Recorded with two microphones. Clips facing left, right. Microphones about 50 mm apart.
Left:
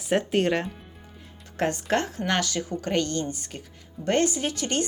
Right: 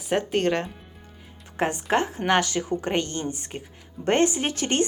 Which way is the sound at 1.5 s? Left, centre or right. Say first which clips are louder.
Right 1 dB; centre.